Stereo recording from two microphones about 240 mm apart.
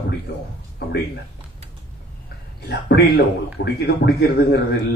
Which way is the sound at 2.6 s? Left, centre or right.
Left.